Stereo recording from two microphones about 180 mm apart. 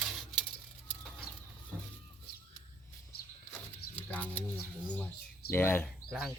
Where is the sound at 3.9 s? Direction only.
10° left (ahead or behind).